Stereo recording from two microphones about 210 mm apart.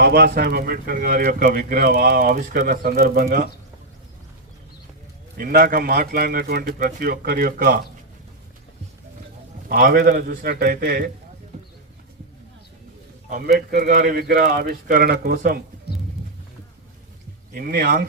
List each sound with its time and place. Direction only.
0.0 s speech: 50° right (ahead or behind)
5.4 s speech: 45° right (ahead or behind)
9.6 s speech: 45° right (ahead or behind)
13.7 s speech: 45° right (ahead or behind)
17.5 s speech: 45° right (ahead or behind)